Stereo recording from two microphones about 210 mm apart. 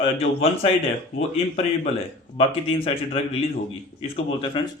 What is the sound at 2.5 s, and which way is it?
Speech, 25° left (ahead or behind).